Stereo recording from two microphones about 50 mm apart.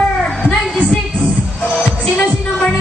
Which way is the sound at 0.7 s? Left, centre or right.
Centre.